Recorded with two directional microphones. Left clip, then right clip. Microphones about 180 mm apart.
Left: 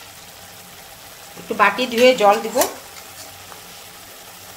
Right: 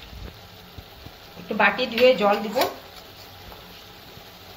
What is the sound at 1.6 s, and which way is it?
Speech, 90° left.